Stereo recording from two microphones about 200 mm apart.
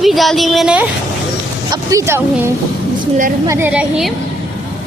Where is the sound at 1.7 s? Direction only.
15° right (ahead or behind).